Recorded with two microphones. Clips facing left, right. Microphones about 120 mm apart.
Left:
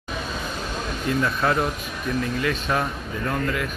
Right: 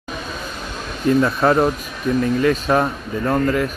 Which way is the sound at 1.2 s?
40° right (ahead or behind).